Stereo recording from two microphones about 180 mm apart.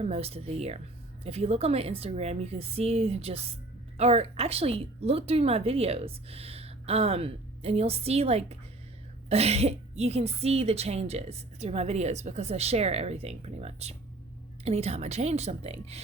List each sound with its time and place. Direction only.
0.0 s speech: 35° right (ahead or behind)